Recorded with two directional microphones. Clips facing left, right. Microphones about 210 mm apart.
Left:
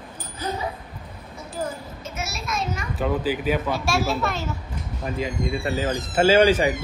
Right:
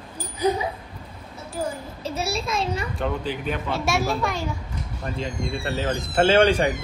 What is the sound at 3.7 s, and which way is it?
Speech, 20° right (ahead or behind).